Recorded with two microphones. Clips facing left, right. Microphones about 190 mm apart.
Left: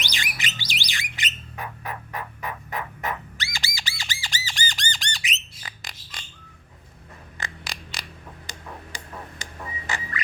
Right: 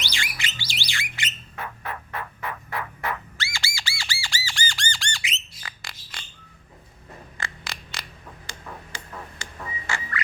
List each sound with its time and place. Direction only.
0.0 s music: 15° left (ahead or behind)
0.7 s bird: 15° left (ahead or behind)
7.3 s a sound: 15° left (ahead or behind)